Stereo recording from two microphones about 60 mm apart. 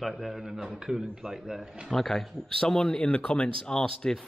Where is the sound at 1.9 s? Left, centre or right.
Centre.